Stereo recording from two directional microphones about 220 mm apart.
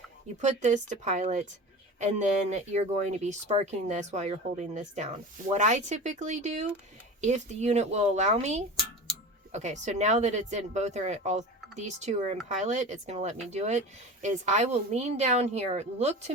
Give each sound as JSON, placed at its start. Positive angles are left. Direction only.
{"t": 0.4, "sound": "speech", "side_deg": -35}